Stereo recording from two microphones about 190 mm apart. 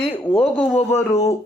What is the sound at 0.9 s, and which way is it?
Speech, 15° left (ahead or behind).